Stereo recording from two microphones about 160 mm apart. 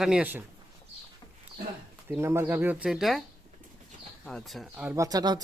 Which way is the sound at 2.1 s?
15° right (ahead or behind).